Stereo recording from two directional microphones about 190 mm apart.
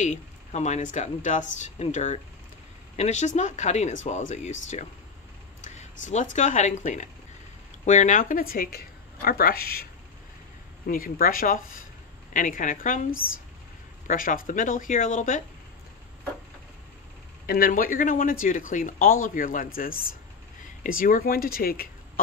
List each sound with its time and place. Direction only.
0.0 s speech: 40° left (ahead or behind); by 9.8 s 55° left (ahead or behind)
10.9 s speech: 50° left (ahead or behind)
17.5 s speech: 50° left (ahead or behind)